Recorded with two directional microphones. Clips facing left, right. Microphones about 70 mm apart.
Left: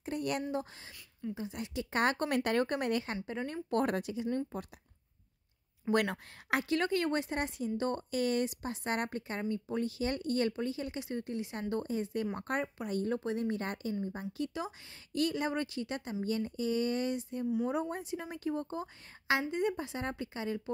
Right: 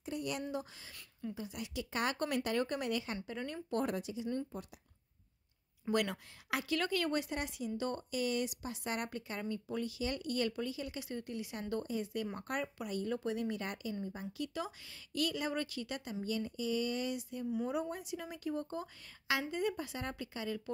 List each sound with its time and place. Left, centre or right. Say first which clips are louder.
0.0 s speech: left 4 dB; left
3.4 s speech: left 4 dB; left
3.7 s speech: left 5 dB; left
5.9 s speech: left 4 dB; left
14.3 s speech: left 3 dB; left